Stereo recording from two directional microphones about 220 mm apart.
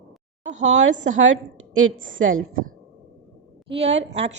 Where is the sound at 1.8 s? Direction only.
65° right (ahead or behind).